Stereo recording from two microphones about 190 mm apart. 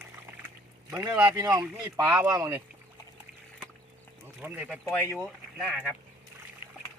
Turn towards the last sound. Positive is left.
turn(degrees=-5)  # may be behind; listen again after turning